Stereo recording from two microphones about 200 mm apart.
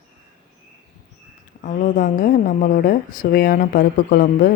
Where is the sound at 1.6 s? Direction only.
45° left (ahead or behind).